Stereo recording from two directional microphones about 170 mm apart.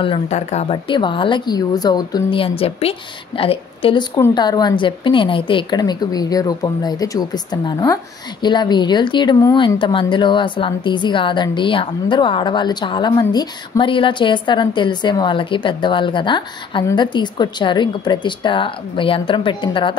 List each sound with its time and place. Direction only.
0.0 s a woman's voice: 35° left (ahead or behind)